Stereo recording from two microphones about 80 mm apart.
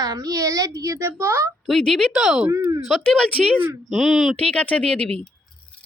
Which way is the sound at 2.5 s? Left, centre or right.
Right.